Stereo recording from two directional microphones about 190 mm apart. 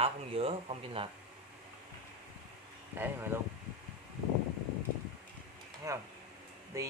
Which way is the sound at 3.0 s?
10° right (ahead or behind).